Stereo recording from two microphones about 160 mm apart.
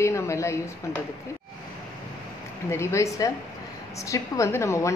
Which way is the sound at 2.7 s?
15° left (ahead or behind).